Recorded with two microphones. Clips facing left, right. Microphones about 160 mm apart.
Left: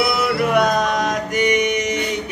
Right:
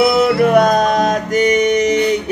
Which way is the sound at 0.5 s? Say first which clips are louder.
Right 5 dB; 40° right (ahead or behind).